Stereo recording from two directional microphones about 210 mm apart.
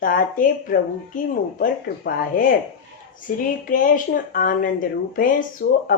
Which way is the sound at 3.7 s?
40° left (ahead or behind).